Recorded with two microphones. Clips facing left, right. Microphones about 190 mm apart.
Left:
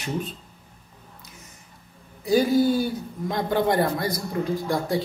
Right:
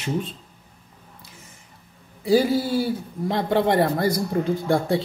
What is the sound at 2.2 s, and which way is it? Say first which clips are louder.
A man's voice: even; 30° right (ahead or behind).